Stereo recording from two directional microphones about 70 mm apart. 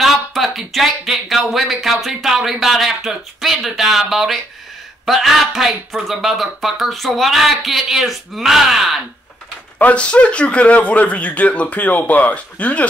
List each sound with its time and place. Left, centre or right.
0.0 s speech: centre
9.8 s speech: left